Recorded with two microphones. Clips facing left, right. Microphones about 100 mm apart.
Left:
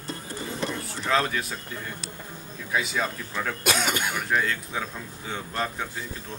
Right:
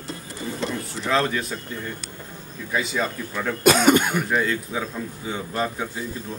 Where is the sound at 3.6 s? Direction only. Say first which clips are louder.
Right 11 dB; 50° right (ahead or behind).